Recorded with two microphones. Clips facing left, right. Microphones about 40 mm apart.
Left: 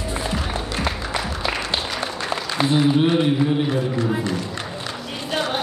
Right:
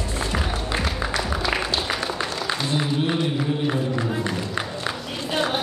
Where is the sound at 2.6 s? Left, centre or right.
Left.